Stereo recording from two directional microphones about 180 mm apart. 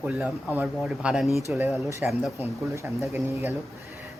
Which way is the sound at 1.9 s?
15° right (ahead or behind).